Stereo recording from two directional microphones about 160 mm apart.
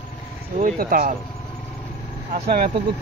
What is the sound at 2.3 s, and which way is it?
Speech, 70° right (ahead or behind).